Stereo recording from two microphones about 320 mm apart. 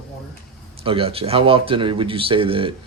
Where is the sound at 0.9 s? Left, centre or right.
Centre.